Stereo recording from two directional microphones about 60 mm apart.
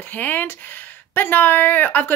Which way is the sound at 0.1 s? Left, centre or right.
Left.